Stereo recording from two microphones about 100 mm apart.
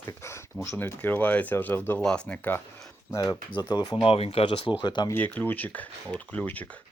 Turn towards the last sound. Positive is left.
turn(degrees=15)  # may be behind; listen again after turning